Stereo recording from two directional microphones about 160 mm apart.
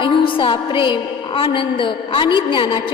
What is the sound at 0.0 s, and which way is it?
A woman's voice, 30° left (ahead or behind).